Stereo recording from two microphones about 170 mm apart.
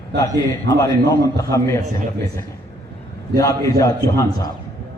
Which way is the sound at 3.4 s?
20° left (ahead or behind).